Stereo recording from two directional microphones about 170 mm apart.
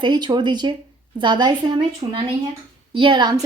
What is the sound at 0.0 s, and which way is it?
A woman's voice, 25° right (ahead or behind).